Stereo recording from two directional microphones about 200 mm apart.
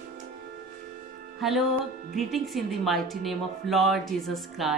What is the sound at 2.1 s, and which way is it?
A woman's voice, centre (ahead or behind).